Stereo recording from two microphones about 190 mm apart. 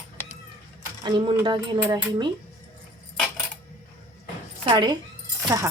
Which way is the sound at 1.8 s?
10° right (ahead or behind).